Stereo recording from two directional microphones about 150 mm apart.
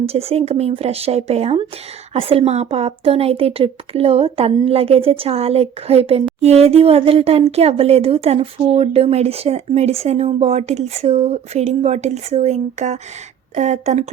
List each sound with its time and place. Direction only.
0.0 s speech: 40° right (ahead or behind)